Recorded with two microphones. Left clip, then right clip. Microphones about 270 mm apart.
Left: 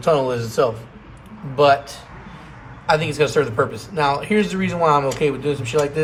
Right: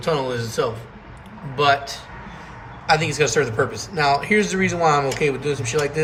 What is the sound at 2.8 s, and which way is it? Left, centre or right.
A man's voice, centre.